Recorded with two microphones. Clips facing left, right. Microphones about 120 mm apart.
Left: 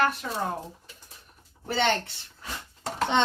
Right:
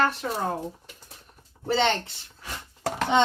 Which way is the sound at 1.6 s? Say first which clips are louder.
Right 3 dB; 25° right (ahead or behind).